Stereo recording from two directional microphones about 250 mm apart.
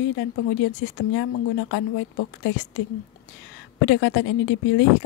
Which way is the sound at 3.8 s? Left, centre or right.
Left.